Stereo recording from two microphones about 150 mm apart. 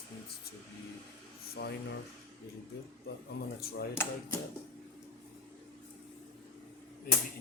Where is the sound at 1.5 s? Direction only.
90° left.